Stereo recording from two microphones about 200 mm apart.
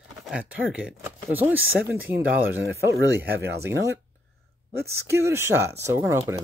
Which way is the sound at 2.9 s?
55° right (ahead or behind).